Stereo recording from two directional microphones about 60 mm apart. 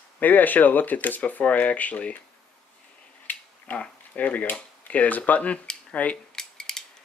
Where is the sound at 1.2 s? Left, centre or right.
Left.